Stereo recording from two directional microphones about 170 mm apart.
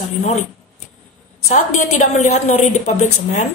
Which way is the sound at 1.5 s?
45° left (ahead or behind).